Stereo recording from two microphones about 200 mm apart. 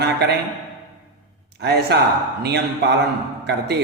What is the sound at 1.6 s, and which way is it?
A man's voice, 55° right (ahead or behind).